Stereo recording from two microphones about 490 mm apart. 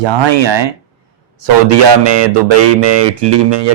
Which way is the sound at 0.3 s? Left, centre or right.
Right.